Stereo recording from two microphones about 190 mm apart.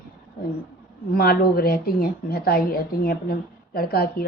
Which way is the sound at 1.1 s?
55° left (ahead or behind).